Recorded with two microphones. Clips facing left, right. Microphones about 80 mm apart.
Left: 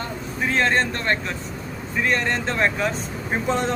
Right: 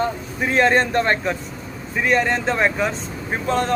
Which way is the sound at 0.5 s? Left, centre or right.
Centre.